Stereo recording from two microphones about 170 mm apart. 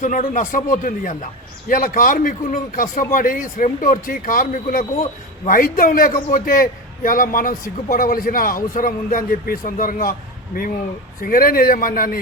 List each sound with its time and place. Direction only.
0.0 s a man's voice: 50° left (ahead or behind)